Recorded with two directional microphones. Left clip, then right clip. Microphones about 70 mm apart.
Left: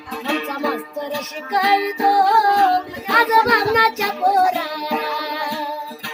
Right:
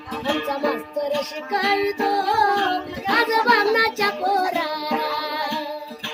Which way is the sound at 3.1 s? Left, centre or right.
Right.